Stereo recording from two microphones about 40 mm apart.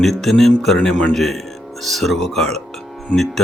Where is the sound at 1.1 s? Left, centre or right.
Centre.